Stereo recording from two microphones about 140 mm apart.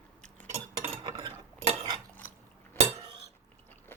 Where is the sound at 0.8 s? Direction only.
35° right (ahead or behind).